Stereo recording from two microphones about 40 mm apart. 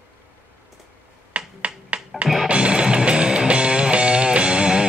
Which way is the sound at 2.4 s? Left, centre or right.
Right.